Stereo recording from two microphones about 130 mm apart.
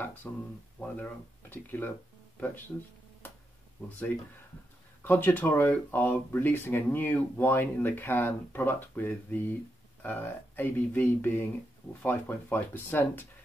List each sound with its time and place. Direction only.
0.0 s speech: 15° left (ahead or behind)
5.0 s speech: 15° left (ahead or behind)